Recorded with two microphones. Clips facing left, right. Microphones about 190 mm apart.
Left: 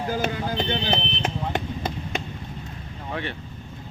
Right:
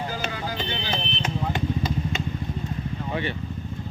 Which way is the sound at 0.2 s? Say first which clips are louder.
Left 4 dB; 55° left (ahead or behind).